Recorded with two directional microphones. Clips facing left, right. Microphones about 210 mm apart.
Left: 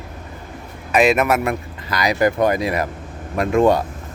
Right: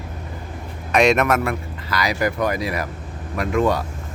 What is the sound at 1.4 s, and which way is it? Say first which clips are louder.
Speech: left 2 dB; 20° left (ahead or behind).